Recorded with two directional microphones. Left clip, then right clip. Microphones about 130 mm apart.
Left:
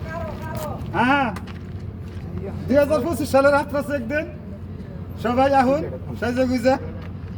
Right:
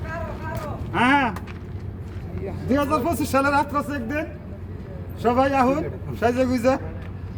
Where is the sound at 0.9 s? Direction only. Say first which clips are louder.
Even; 40° right (ahead or behind).